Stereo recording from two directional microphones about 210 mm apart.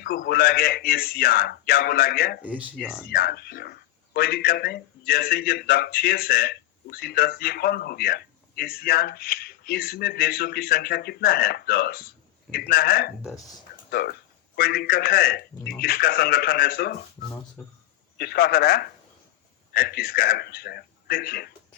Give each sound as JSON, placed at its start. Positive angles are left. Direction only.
{"t": 0.0, "sound": "speech", "side_deg": 45}
{"t": 2.4, "sound": "speech", "side_deg": -5}
{"t": 3.1, "sound": "speech", "side_deg": 45}
{"t": 18.2, "sound": "speech", "side_deg": 50}